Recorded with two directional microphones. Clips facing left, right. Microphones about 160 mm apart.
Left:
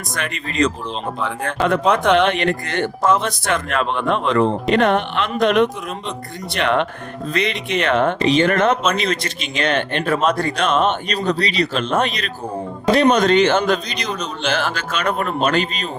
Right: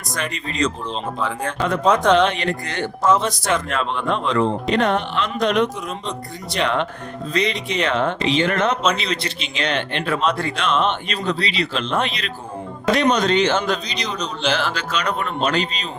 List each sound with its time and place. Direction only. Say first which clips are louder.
0.2 s speech: left 3 dB; 60° left (ahead or behind)